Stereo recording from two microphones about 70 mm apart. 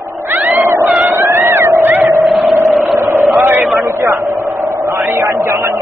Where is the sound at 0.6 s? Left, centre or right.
Right.